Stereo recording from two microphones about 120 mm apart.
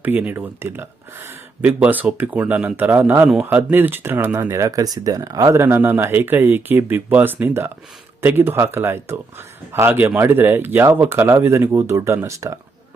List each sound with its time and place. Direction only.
0.0 s speech: 15° right (ahead or behind)